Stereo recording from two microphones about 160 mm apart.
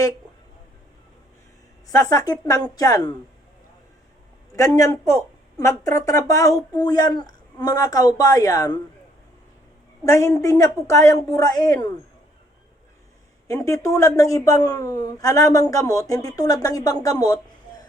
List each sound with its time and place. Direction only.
1.9 s speech: 20° left (ahead or behind)
4.5 s speech: 20° left (ahead or behind)
10.0 s speech: 20° left (ahead or behind)
13.5 s speech: 20° left (ahead or behind)